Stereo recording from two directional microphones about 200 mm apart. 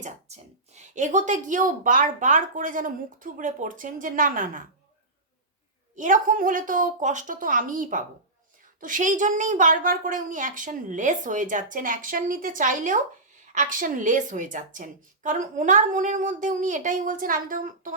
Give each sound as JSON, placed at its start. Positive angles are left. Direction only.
{"t": 0.0, "sound": "a woman's voice", "side_deg": -35}
{"t": 6.0, "sound": "a woman's voice", "side_deg": -40}